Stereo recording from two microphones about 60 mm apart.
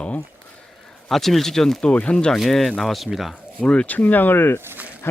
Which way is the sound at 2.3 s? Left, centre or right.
Centre.